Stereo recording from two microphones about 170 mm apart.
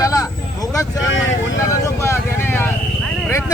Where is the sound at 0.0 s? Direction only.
20° left (ahead or behind).